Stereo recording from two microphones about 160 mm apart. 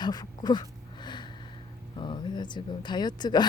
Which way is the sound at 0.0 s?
25° left (ahead or behind).